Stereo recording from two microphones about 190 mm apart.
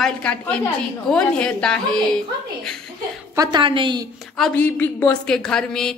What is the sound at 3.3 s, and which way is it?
Speech, 20° right (ahead or behind).